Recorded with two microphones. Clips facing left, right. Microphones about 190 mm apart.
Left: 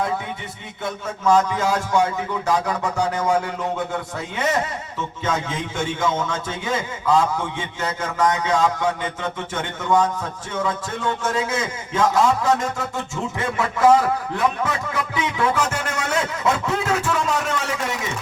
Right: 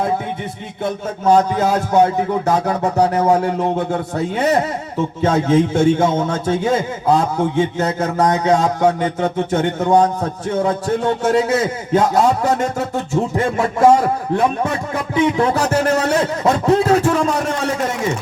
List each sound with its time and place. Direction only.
0.9 s a man's voice: 35° right (ahead or behind)